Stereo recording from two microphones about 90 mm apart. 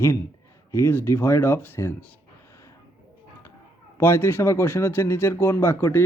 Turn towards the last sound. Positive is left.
turn(degrees=25)  # may be behind; listen again after turning